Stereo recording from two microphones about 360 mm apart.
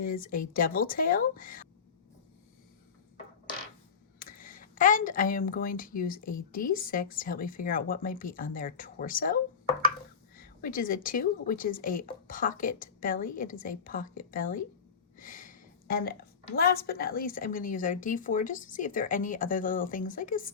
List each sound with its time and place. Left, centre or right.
0.0 s speech: left
4.2 s speech: left
15.2 s a sound: left
16.6 s speech: left